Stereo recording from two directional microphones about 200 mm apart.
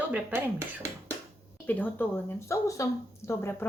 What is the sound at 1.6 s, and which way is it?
Speech, 10° left (ahead or behind).